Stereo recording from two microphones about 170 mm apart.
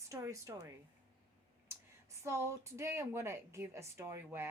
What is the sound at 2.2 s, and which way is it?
A woman's voice, 15° right (ahead or behind).